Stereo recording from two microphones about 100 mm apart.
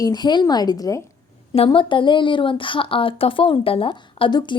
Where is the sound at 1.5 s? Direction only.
70° left (ahead or behind).